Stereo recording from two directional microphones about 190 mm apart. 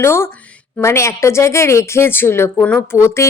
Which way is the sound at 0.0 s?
15° left (ahead or behind).